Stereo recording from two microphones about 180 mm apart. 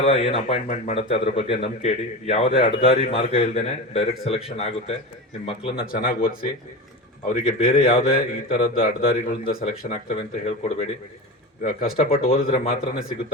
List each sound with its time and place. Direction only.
0.0 s a man's voice: 35° left (ahead or behind)
5.8 s speech: 55° left (ahead or behind)
7.3 s speech: 50° left (ahead or behind)
11.6 s speech: 55° left (ahead or behind)